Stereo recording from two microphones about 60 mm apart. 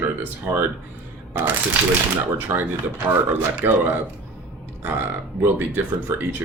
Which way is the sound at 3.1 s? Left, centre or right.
Right.